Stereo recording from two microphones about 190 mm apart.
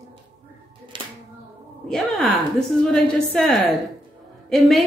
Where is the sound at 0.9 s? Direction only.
25° right (ahead or behind).